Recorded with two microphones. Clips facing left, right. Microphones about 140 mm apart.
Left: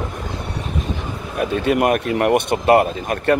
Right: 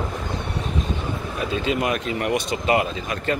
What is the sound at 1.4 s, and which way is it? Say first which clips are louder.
Speech: left 7 dB; 55° left (ahead or behind).